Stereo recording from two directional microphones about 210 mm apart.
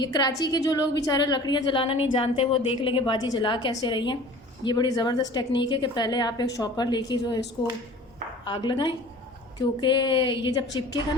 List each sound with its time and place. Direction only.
0.0 s a woman's voice: 20° left (ahead or behind)
8.4 s a woman's voice: 20° left (ahead or behind)